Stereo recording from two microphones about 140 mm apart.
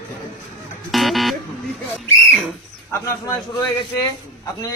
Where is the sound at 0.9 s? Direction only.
Centre (ahead or behind).